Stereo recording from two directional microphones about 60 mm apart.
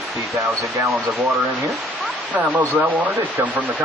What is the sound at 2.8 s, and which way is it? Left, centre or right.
Speech, right.